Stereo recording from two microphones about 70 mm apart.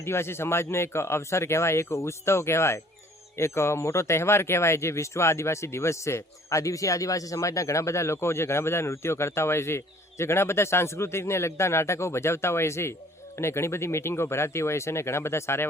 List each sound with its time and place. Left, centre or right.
0.0 s speech: left